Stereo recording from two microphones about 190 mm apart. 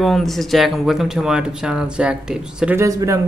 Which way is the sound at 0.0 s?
Centre (ahead or behind).